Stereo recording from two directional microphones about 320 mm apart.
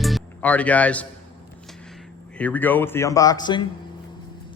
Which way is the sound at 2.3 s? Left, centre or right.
Centre.